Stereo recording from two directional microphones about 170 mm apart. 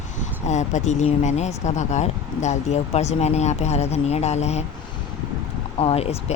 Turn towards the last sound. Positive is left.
turn(degrees=35)  # may be behind; listen again after turning